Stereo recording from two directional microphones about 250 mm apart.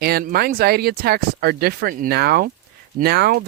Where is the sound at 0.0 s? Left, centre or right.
Right.